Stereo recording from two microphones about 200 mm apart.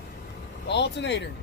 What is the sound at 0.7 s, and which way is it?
Speech, 60° left (ahead or behind).